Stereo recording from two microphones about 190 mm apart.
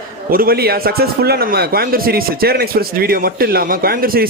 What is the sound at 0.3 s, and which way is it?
A man's voice, 50° right (ahead or behind).